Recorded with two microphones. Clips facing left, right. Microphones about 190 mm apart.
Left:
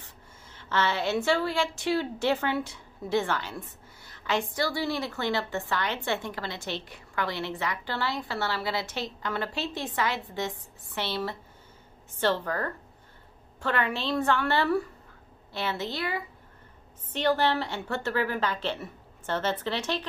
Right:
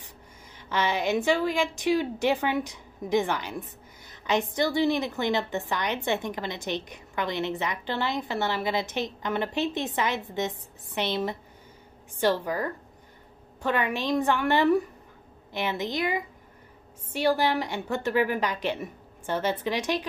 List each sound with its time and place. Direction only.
0.6 s a woman's voice: 15° right (ahead or behind)